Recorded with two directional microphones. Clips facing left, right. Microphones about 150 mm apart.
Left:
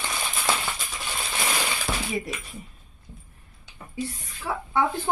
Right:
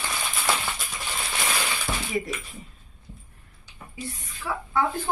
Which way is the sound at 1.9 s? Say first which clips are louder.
Left 1 dB; 20° left (ahead or behind).